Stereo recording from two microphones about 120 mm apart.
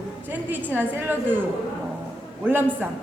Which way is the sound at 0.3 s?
15° right (ahead or behind).